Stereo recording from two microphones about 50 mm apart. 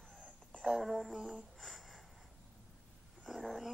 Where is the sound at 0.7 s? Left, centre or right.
Centre.